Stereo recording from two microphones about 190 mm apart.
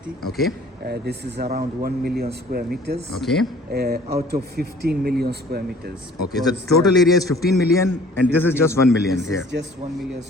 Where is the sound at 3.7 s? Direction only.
55° right (ahead or behind).